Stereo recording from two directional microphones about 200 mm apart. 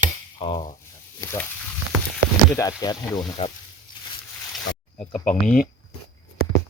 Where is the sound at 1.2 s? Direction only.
15° left (ahead or behind).